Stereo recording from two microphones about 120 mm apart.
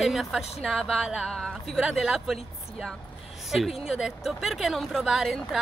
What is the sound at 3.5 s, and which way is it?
Speech, centre (ahead or behind).